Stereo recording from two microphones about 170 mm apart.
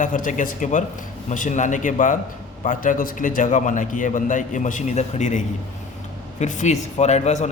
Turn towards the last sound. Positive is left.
turn(degrees=40)  # may be behind; listen again after turning